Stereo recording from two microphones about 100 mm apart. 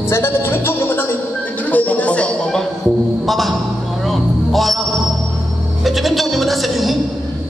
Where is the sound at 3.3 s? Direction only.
Centre (ahead or behind).